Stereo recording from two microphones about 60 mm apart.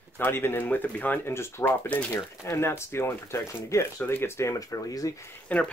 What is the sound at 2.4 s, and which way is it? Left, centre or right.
Speech, left.